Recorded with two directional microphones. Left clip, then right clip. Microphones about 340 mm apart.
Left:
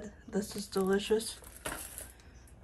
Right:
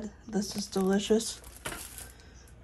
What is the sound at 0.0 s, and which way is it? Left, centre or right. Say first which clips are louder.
Speech: right 2 dB; centre.